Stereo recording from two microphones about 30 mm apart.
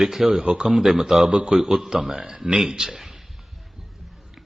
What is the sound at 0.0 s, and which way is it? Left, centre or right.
Speech, centre.